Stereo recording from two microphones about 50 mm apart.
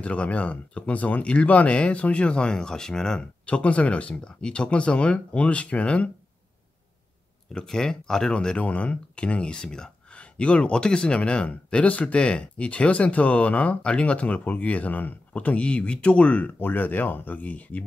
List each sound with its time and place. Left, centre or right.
0.0 s speech: left
3.4 s speech: left
7.5 s speech: centre; by 17.8 s left